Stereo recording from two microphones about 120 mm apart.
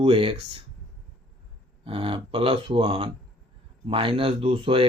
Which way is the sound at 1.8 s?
50° right (ahead or behind).